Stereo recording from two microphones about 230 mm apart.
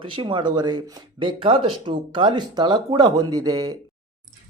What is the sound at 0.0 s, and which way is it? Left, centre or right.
Speech, right.